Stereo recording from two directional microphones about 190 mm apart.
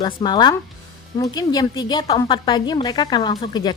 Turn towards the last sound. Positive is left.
turn(degrees=20)  # may be behind; listen again after turning